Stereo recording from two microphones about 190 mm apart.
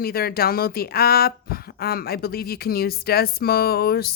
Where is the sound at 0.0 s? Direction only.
55° left (ahead or behind).